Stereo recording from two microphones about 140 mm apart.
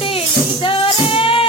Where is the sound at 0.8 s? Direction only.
40° left (ahead or behind).